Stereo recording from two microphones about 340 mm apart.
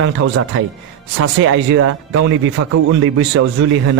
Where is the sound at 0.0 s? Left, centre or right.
Right.